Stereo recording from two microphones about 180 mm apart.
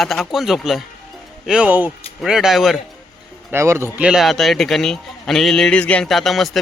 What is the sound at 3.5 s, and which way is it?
Speech, 15° right (ahead or behind).